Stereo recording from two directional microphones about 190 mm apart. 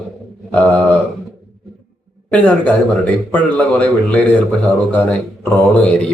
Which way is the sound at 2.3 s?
5° left (ahead or behind).